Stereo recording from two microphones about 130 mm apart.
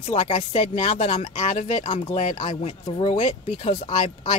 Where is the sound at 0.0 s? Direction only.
55° left (ahead or behind).